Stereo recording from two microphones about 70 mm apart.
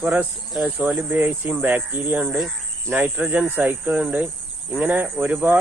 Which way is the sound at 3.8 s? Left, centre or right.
Centre.